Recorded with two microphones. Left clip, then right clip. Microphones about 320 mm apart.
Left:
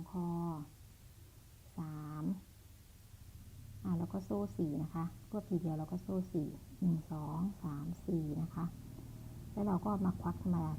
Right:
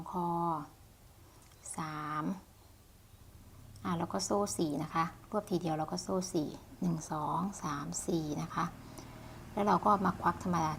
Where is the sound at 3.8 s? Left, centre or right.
Centre.